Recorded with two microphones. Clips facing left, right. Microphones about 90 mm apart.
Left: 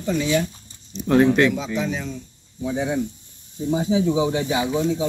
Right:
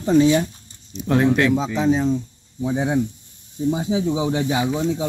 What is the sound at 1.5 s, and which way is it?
Speech, 30° right (ahead or behind).